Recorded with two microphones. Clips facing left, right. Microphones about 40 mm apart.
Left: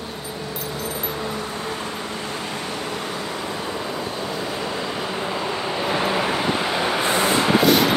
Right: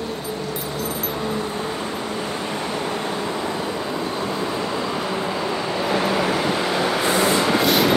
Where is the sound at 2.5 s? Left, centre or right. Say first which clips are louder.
Right 3 dB; right.